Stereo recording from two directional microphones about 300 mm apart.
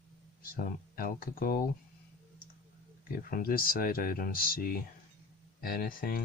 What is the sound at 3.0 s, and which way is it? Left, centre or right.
Speech, left.